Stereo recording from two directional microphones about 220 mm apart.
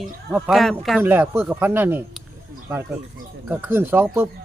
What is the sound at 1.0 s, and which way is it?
Speech, 10° right (ahead or behind).